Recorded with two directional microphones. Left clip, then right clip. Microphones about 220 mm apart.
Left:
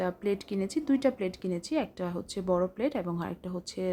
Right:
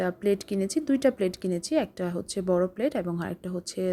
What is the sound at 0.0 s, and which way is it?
Speech, 10° right (ahead or behind).